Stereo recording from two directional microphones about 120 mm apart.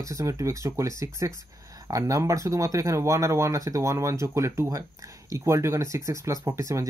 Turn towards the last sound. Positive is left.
turn(degrees=-25)  # may be behind; listen again after turning